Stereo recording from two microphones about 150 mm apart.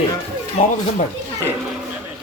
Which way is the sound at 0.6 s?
50° left (ahead or behind).